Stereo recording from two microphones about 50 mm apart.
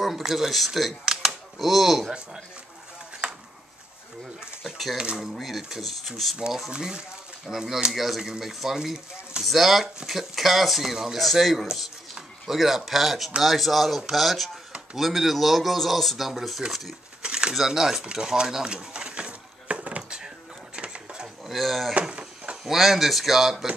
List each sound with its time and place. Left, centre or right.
0.0 s speech: centre
3.2 s a sound: right
4.9 s speech: centre
5.3 s speech: centre
6.7 s speech: centre
7.4 s speech: centre
9.4 s speech: centre
17.2 s a sound: centre
17.6 s speech: centre
18.0 s a sound: centre
21.5 s speech: centre
22.1 s a sound: centre
22.7 s speech: centre